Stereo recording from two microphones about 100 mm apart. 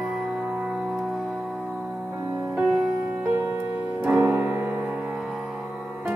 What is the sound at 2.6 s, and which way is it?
Music, 5° right (ahead or behind).